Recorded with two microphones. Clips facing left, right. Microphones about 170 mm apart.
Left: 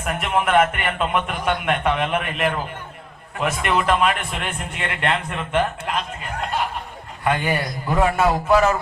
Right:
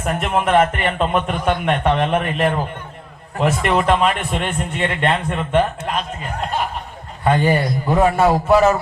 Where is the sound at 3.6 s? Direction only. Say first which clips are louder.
Right 2 dB; 30° right (ahead or behind).